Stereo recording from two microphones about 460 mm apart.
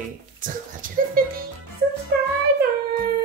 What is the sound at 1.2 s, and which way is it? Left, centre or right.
Music, centre.